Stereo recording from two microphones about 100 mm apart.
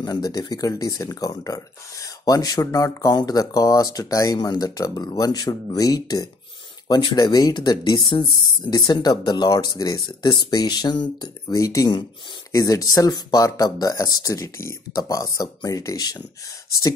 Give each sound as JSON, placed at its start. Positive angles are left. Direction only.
{"t": 0.0, "sound": "speech", "side_deg": 40}
{"t": 11.5, "sound": "speech", "side_deg": 35}